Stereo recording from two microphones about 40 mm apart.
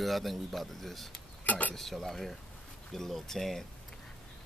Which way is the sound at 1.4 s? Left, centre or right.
Left.